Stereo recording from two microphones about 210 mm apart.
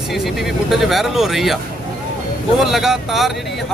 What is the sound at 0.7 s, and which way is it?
Speech, centre (ahead or behind).